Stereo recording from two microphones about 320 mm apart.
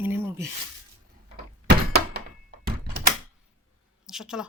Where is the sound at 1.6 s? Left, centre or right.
Right.